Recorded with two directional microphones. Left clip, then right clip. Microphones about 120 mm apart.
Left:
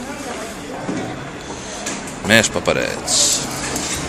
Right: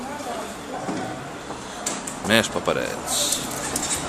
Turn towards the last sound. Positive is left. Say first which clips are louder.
# left 7 dB
turn(degrees=-15)  # may be behind; listen again after turning